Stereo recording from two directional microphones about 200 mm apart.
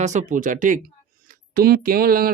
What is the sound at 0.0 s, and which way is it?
Speech, 35° right (ahead or behind).